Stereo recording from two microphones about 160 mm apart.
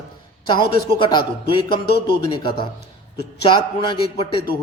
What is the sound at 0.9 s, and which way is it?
A man's voice, 30° left (ahead or behind).